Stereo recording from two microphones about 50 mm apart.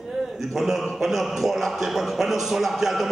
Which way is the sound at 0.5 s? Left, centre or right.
Centre.